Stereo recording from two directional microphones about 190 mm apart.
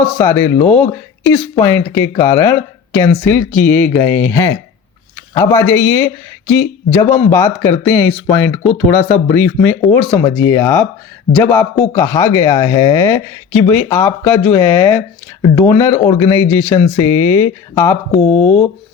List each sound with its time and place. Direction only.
0.0 s speech: 10° left (ahead or behind)